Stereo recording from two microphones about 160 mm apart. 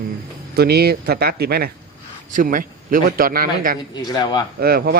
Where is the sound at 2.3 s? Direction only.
60° right (ahead or behind).